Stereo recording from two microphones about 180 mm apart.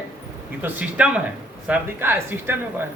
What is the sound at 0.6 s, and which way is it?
Speech, 5° right (ahead or behind).